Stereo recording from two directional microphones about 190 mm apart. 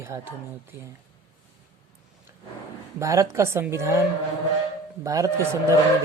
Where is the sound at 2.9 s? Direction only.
15° right (ahead or behind).